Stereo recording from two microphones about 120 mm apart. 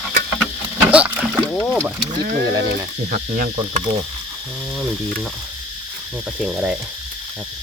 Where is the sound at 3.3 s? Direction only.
90° right.